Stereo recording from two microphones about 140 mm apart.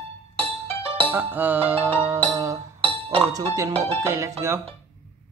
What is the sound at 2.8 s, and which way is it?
Music, 40° right (ahead or behind).